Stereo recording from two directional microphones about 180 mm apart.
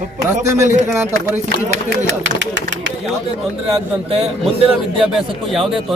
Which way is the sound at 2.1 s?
90° right.